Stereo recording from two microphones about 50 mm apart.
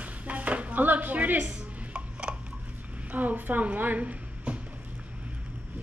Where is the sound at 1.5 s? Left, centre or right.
Centre.